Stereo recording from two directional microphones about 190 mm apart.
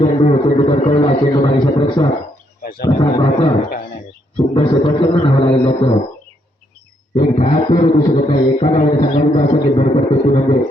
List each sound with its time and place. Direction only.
0.0 s a man's voice: 30° left (ahead or behind)
4.5 s a man's voice: 25° left (ahead or behind)
7.2 s a sound: 35° left (ahead or behind)